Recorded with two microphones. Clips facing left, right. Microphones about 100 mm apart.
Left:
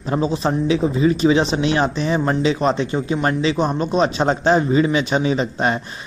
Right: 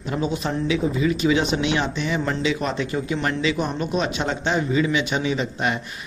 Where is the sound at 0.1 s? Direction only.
35° left (ahead or behind).